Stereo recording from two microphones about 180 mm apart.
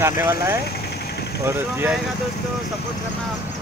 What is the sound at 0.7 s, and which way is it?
Vehicle, 65° left (ahead or behind).